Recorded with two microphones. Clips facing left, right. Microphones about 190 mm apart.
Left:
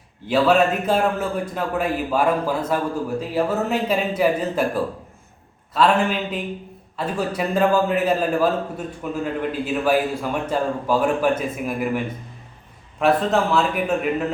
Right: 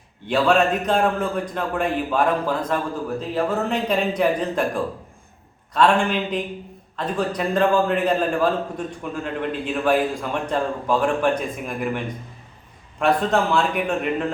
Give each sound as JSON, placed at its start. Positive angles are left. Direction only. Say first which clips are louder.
{"t": 0.3, "sound": "a man's voice", "louder": "left 1 dB", "side_deg": 5}